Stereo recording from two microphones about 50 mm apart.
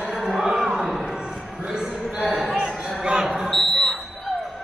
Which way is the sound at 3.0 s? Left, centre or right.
Centre.